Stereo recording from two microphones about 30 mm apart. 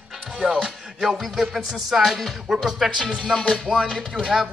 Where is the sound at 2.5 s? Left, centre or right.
Right.